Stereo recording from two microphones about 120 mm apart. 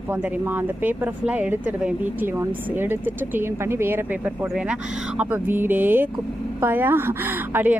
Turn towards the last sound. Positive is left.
turn(degrees=-15)  # may be behind; listen again after turning